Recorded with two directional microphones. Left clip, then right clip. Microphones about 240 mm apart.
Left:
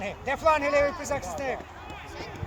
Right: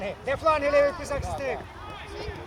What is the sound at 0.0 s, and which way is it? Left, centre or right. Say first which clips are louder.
Speech: even; left.